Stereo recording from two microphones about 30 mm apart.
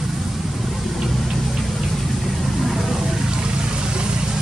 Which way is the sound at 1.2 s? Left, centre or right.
Centre.